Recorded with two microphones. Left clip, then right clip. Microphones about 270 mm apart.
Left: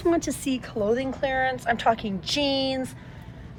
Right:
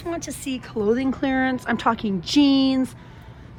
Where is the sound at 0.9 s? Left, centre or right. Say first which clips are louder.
Right 3 dB; right.